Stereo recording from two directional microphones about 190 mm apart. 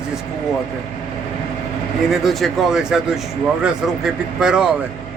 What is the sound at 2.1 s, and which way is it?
Speech, centre (ahead or behind).